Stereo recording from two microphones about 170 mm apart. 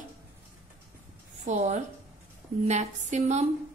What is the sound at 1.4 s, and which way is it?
A woman's voice, 45° right (ahead or behind).